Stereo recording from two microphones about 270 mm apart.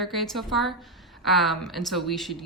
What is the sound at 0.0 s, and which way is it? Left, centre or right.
Speech, centre.